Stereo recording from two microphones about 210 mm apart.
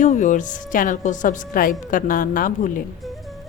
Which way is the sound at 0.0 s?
35° left (ahead or behind).